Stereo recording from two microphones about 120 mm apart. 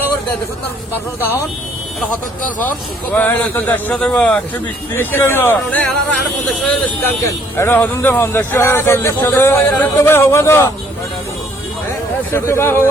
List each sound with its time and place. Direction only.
2.6 s a man's voice: 15° left (ahead or behind)
12.3 s a man's voice: 20° left (ahead or behind)